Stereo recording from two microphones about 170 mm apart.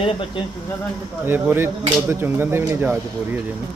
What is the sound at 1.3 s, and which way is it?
Speech, 15° right (ahead or behind).